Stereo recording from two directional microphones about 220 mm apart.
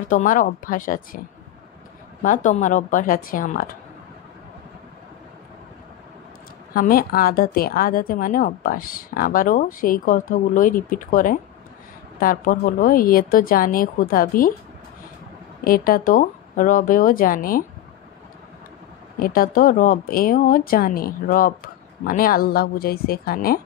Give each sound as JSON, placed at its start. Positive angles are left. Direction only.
{"t": 0.1, "sound": "a woman's voice", "side_deg": 35}
{"t": 2.2, "sound": "a woman's voice", "side_deg": 35}
{"t": 6.7, "sound": "a woman's voice", "side_deg": 40}
{"t": 15.6, "sound": "a woman's voice", "side_deg": 40}
{"t": 19.1, "sound": "a woman's voice", "side_deg": 40}